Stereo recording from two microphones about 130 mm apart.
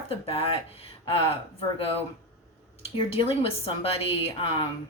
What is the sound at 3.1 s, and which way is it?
A woman's voice, 45° left (ahead or behind).